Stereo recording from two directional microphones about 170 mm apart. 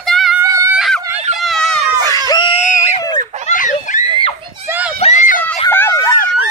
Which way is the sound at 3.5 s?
45° left (ahead or behind).